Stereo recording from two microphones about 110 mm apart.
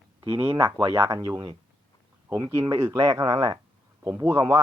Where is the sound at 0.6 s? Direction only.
35° right (ahead or behind).